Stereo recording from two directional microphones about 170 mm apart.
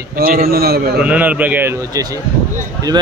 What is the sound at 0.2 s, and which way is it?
Speech, 60° right (ahead or behind).